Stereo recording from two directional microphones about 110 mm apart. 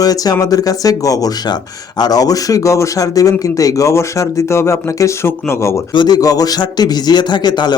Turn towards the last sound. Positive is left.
turn(degrees=40)  # may be behind; listen again after turning